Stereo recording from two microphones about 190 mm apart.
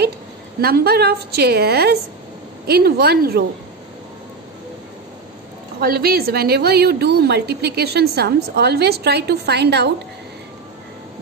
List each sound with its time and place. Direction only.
0.6 s a woman's voice: 55° right (ahead or behind)
5.8 s a woman's voice: 55° right (ahead or behind)